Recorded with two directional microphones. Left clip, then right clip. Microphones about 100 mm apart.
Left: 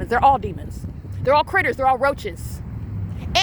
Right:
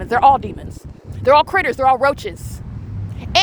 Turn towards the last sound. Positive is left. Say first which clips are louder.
# right 4 dB
turn(degrees=-45)  # may be behind; listen again after turning